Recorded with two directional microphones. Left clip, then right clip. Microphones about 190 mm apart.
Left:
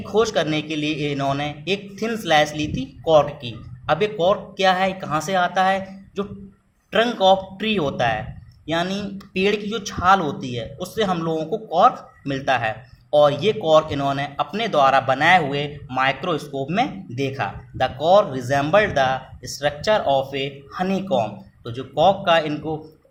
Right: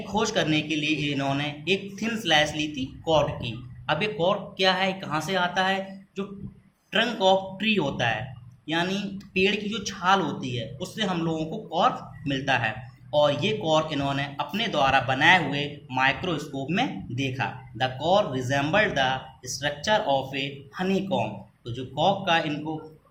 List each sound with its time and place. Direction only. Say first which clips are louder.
0.1 s a man's voice: left 5 dB; 55° left (ahead or behind)